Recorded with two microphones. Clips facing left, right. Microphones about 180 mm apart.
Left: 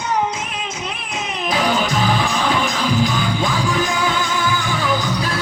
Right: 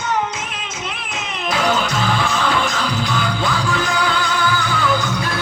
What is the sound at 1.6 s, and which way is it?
Music, 10° left (ahead or behind).